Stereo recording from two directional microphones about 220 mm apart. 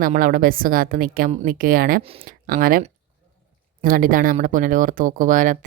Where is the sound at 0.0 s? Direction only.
40° right (ahead or behind).